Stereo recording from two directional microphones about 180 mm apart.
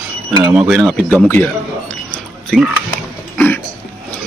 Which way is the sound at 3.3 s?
10° left (ahead or behind).